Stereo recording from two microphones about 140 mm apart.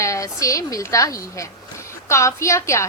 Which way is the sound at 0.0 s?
20° left (ahead or behind).